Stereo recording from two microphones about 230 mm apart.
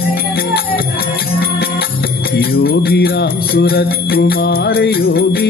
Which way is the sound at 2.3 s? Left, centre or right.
Left.